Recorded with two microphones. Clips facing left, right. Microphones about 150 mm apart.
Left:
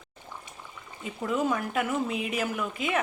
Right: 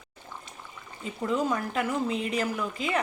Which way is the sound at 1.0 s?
5° left (ahead or behind).